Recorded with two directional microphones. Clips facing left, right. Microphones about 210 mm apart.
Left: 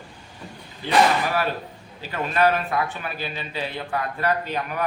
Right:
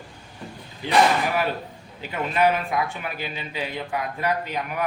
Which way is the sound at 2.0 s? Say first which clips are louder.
Even; 15° right (ahead or behind).